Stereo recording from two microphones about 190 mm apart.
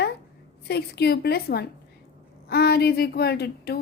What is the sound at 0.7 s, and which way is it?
A woman's voice, 60° left (ahead or behind).